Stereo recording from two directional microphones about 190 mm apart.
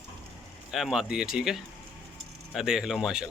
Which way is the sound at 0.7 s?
Centre (ahead or behind).